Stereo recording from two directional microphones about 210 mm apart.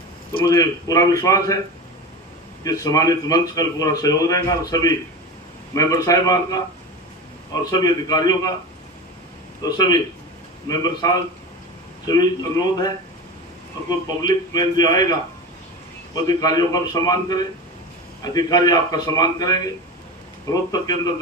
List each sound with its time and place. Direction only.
0.3 s a man's voice: 15° left (ahead or behind)
2.6 s a man's voice: 15° left (ahead or behind)
9.6 s a man's voice: 20° left (ahead or behind)
14.2 s a man's voice: 20° left (ahead or behind)
16.1 s a man's voice: 20° left (ahead or behind)